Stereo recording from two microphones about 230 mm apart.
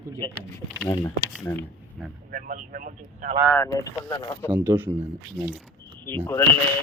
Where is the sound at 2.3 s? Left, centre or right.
Right.